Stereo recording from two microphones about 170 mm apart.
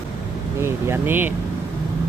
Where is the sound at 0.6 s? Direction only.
15° right (ahead or behind).